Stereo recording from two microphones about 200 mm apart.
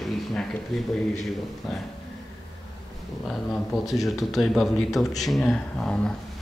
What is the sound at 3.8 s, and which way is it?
Speech, centre (ahead or behind).